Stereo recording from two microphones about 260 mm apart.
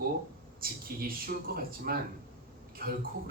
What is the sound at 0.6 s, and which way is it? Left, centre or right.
Speech, right.